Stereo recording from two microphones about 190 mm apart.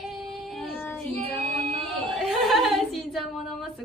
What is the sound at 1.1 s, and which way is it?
Child singing, 35° right (ahead or behind).